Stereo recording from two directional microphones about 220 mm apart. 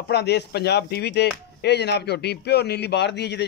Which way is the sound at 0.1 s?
50° left (ahead or behind).